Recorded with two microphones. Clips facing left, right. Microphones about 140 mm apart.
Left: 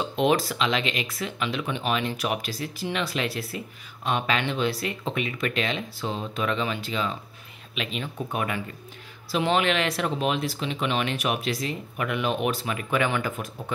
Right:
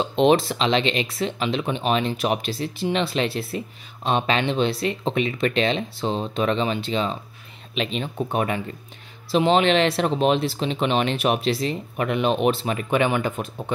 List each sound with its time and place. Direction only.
0.1 s speech: 25° right (ahead or behind)